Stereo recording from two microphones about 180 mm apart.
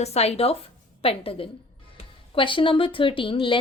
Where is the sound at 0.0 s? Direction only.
35° left (ahead or behind).